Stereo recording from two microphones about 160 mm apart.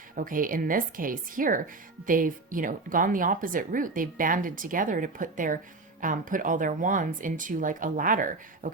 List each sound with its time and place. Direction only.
0.2 s a woman's voice: 60° right (ahead or behind)